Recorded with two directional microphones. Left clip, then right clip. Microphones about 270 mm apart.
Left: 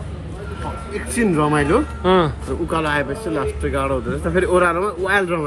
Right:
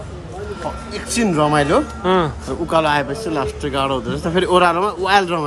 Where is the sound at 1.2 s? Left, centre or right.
Centre.